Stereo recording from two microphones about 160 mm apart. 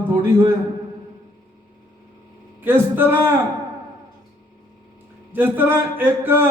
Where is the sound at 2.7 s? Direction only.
15° right (ahead or behind).